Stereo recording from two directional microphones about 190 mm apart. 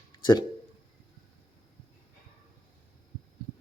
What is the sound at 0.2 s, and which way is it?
Speech, 25° left (ahead or behind).